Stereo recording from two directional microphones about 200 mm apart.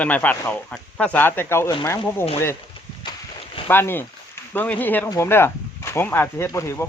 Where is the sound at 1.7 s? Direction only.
25° left (ahead or behind).